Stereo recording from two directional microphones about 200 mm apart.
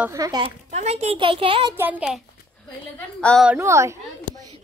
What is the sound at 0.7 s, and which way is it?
A woman's voice, 35° right (ahead or behind).